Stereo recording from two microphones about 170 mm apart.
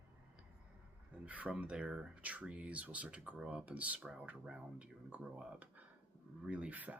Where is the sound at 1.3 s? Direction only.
10° right (ahead or behind).